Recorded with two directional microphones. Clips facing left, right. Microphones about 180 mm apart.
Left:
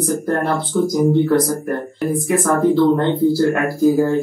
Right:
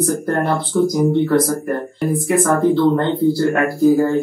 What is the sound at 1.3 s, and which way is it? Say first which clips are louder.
Speech: even; centre (ahead or behind).